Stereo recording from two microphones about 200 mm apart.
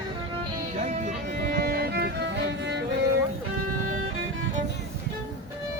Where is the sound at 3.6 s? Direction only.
90° right.